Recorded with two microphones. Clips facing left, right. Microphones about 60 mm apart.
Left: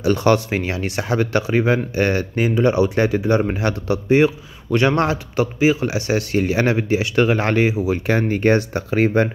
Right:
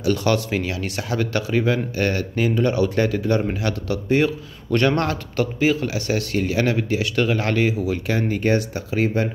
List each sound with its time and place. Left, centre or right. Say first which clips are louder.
0.0 s speech: left 4 dB; left
8.1 s speech: left 4 dB; left